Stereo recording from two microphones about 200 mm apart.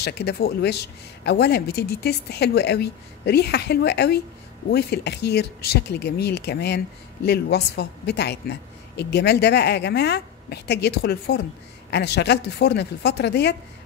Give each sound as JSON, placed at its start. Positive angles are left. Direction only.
{"t": 0.0, "sound": "speech", "side_deg": 55}